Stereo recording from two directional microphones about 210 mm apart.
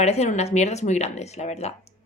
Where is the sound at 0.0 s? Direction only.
30° left (ahead or behind).